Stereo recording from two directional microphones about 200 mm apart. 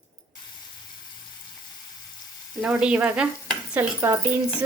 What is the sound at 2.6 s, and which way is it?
Speech, 5° right (ahead or behind).